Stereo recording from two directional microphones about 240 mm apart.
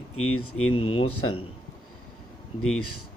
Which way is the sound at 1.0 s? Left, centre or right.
Left.